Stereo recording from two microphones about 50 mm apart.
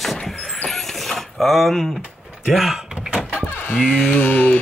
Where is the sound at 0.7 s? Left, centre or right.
Centre.